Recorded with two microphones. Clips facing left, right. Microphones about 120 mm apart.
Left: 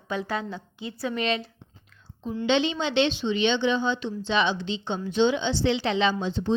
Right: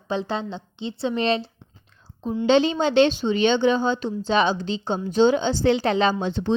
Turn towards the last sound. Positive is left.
turn(degrees=-70)  # may be behind; listen again after turning